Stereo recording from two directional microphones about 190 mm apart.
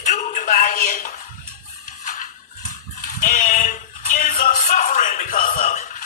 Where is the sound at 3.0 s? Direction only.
45° left (ahead or behind).